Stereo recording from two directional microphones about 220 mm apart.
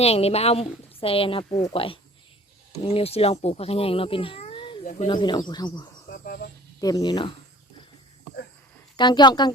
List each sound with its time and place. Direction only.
0.0 s a woman's voice: 30° left (ahead or behind)
6.1 s a sound: 40° left (ahead or behind)
6.7 s speech: 15° left (ahead or behind)
9.0 s a woman's voice: 20° left (ahead or behind)